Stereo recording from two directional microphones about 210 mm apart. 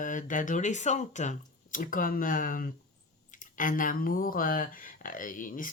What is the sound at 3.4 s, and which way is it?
Speech, 40° left (ahead or behind).